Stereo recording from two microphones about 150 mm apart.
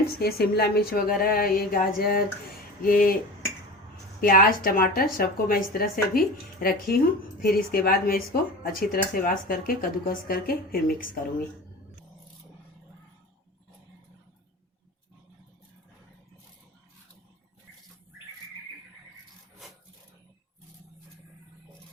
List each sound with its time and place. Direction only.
0.2 s a woman's voice: 90° left; by 3.2 s 70° left (ahead or behind)
4.2 s a woman's voice: 70° left (ahead or behind)